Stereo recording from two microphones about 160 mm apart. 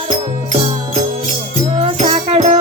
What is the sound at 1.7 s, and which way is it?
Music, 40° right (ahead or behind).